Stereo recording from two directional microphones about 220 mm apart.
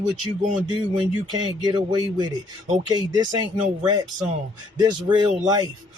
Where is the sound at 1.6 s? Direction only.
20° right (ahead or behind).